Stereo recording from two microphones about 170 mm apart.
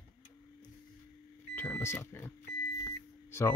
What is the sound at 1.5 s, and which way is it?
Speech, 15° left (ahead or behind).